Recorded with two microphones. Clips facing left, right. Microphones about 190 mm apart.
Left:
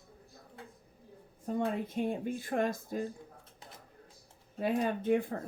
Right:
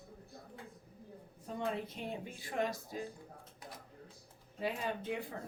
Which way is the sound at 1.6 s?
50° left (ahead or behind).